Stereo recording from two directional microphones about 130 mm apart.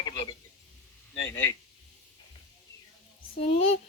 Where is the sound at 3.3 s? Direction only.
50° left (ahead or behind).